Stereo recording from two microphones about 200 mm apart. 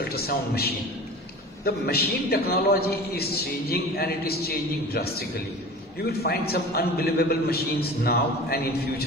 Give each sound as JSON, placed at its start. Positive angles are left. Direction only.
{"t": 0.0, "sound": "a man's voice", "side_deg": 50}